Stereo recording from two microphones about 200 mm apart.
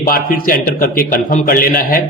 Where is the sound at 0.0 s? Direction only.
45° left (ahead or behind).